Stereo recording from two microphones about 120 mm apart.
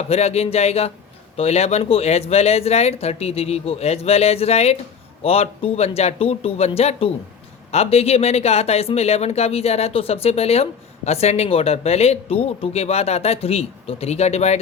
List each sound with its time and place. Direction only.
0.1 s speech: 60° left (ahead or behind)